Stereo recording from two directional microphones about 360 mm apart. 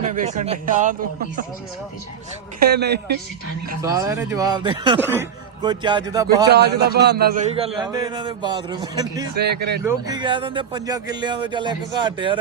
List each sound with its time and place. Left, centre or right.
0.0 s speech: centre
2.6 s speech: right
3.8 s speech: centre
6.2 s speech: right; by 9.2 s centre
9.4 s speech: right
9.8 s speech: centre